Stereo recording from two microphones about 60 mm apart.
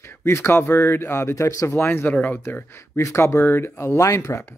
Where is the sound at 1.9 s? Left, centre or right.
Left.